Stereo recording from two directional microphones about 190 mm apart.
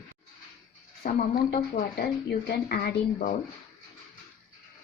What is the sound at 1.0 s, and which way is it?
Speech, 50° left (ahead or behind).